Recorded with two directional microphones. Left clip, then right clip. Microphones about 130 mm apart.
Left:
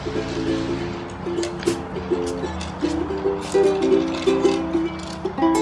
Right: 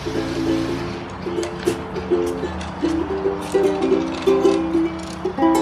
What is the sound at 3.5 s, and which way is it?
Music, 10° right (ahead or behind).